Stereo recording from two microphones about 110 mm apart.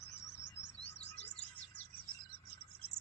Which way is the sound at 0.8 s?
65° left (ahead or behind).